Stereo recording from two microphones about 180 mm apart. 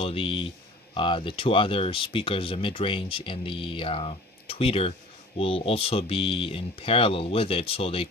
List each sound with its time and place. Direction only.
0.0 s speech: 30° left (ahead or behind)